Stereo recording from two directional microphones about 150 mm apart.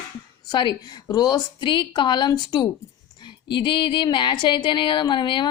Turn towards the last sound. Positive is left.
turn(degrees=30)  # may be behind; listen again after turning